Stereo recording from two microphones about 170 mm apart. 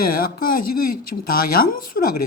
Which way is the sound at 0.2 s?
55° left (ahead or behind).